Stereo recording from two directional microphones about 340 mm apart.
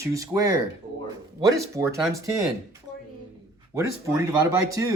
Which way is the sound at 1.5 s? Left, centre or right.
Centre.